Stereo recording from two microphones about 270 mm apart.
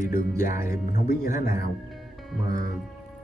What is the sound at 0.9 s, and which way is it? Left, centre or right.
Speech, left.